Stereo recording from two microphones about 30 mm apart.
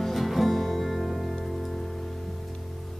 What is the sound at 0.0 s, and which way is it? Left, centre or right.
Music, centre.